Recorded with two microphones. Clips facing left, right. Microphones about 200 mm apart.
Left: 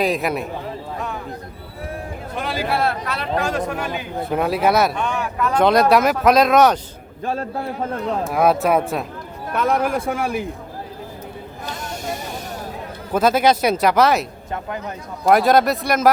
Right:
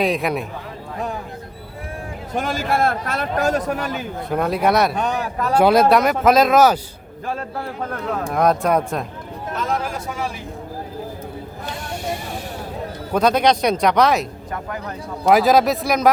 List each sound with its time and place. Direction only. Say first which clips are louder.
0.0 s speech: even; centre (ahead or behind)
2.3 s a man's voice: right 2 dB; 45° right (ahead or behind)
4.4 s speech: even; 5° left (ahead or behind)
4.9 s speech: right 1 dB; 40° right (ahead or behind)
5.5 s speech: right 1 dB; 5° right (ahead or behind)
8.2 s speech: left 1 dB; 5° left (ahead or behind)
9.5 s a man's voice: left 5 dB; 60° left (ahead or behind)
13.1 s speech: even; 5° left (ahead or behind)
15.3 s speech: even; centre (ahead or behind)